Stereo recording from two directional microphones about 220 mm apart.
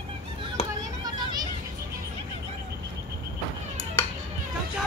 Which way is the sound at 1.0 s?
20° right (ahead or behind).